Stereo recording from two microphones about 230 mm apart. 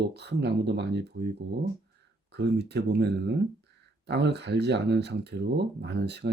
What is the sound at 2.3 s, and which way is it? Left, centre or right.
Speech, right.